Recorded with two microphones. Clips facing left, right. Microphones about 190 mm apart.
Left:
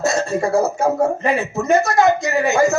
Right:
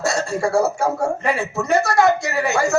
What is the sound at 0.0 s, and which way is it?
Speech, 20° left (ahead or behind).